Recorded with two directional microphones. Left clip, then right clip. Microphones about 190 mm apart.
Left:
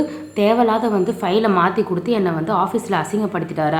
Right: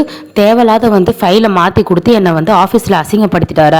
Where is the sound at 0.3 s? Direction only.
50° right (ahead or behind).